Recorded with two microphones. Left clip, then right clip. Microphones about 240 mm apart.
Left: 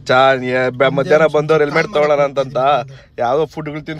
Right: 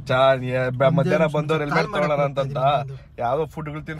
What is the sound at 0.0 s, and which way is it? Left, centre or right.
A man's voice, left.